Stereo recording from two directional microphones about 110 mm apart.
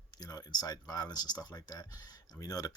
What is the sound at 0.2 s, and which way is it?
Speech, 35° left (ahead or behind).